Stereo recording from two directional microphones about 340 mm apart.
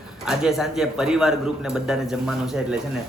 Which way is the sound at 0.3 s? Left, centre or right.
Centre.